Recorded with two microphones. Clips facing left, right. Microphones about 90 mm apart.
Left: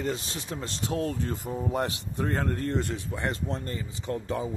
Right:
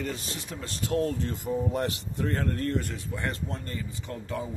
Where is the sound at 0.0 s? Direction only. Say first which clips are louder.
Left 3 dB; 25° left (ahead or behind).